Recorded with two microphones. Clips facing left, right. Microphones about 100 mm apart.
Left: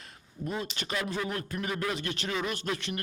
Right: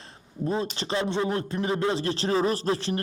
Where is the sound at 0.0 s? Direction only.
30° right (ahead or behind).